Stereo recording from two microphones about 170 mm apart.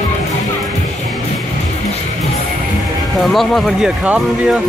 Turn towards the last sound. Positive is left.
turn(degrees=-10)  # may be behind; listen again after turning